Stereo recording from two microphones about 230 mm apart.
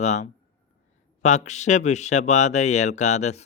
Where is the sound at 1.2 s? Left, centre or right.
Left.